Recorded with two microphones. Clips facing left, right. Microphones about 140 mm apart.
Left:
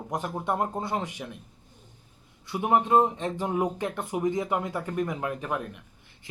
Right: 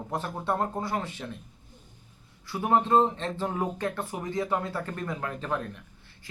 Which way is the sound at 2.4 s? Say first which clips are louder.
Left 1 dB; 20° left (ahead or behind).